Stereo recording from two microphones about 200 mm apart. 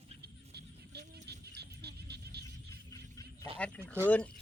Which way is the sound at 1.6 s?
55° right (ahead or behind).